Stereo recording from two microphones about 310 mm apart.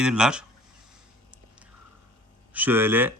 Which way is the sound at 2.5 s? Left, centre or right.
Centre.